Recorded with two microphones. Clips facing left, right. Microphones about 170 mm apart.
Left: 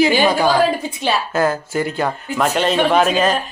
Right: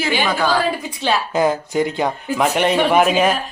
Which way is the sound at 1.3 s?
15° right (ahead or behind).